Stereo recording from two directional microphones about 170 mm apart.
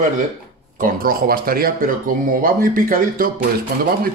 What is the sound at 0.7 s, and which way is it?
Speech, 55° right (ahead or behind).